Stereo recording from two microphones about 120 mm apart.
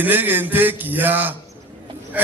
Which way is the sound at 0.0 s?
15° right (ahead or behind).